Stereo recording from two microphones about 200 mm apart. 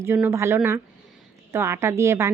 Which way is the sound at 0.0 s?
10° right (ahead or behind).